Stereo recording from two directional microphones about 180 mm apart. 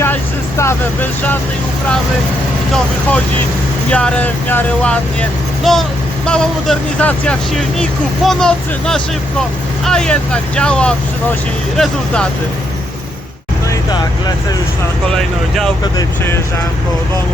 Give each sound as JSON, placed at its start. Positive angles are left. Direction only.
{"t": 0.0, "sound": "vehicle", "side_deg": 15}
{"t": 3.9, "sound": "speech", "side_deg": 10}
{"t": 15.1, "sound": "speech", "side_deg": 5}
{"t": 15.8, "sound": "speech", "side_deg": 15}